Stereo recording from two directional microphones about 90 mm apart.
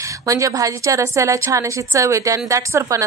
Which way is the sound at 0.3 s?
40° right (ahead or behind).